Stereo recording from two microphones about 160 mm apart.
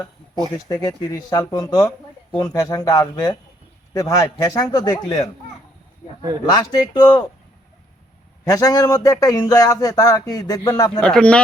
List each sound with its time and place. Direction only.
0.7 s speech: 20° left (ahead or behind)
6.4 s speech: 25° left (ahead or behind)
8.4 s speech: 20° left (ahead or behind)
11.0 s speech: 5° left (ahead or behind)